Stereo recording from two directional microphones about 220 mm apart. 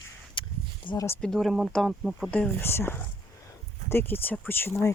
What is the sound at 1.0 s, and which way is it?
Speech, 5° left (ahead or behind).